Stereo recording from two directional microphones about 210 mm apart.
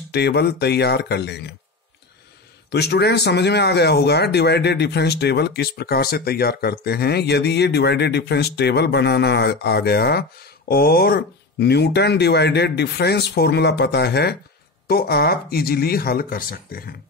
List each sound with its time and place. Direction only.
0.1 s speech: 50° left (ahead or behind)
2.7 s speech: 50° left (ahead or behind)